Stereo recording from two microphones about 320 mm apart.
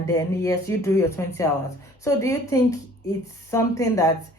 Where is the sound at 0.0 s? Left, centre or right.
Centre.